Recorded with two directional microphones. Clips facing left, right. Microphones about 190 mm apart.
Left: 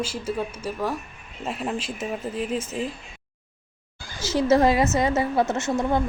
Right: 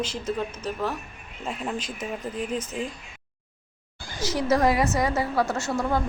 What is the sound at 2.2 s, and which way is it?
Speech, 5° left (ahead or behind).